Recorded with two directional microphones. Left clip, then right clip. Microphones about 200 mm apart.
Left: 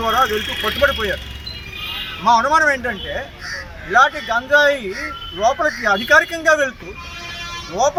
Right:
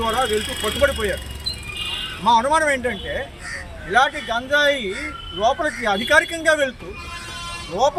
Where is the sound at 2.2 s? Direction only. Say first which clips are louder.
Left 3 dB; 5° right (ahead or behind).